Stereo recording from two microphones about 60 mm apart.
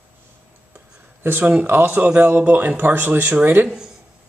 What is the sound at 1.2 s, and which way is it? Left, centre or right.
Speech, right.